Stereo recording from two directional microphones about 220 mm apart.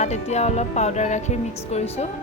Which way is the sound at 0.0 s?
30° left (ahead or behind).